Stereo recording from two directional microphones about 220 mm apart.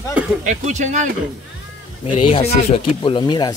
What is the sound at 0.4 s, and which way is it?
Speech, 35° right (ahead or behind).